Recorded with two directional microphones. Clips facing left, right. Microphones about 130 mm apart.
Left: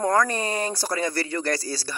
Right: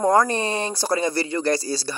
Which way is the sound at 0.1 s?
30° right (ahead or behind).